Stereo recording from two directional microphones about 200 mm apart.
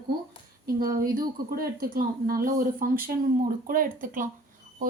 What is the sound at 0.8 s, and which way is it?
Speech, 45° right (ahead or behind).